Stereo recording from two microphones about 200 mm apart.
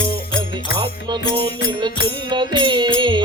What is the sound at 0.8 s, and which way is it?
Music, 25° right (ahead or behind).